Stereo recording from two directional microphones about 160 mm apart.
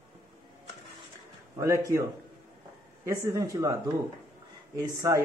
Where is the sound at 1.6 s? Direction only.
20° right (ahead or behind).